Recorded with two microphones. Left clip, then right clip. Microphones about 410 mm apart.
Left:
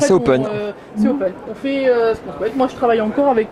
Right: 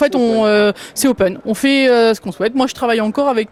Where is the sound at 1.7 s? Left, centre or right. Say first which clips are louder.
Right 2 dB; right.